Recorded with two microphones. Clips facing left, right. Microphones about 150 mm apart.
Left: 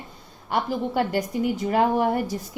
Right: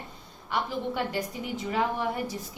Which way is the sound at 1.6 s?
50° left (ahead or behind).